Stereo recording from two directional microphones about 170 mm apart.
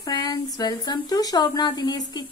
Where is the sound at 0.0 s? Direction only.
25° left (ahead or behind).